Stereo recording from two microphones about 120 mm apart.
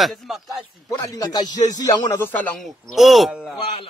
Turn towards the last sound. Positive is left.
turn(degrees=0)  # may be behind; listen again after turning